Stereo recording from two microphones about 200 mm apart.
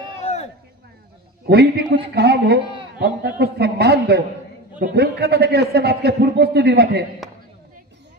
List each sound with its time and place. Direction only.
1.4 s a man's voice: 55° right (ahead or behind)